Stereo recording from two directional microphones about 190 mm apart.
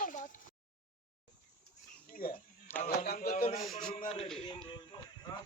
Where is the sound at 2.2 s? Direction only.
50° left (ahead or behind).